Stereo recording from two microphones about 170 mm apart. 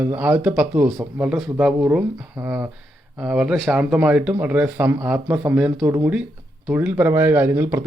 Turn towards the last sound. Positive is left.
turn(degrees=-15)  # may be behind; listen again after turning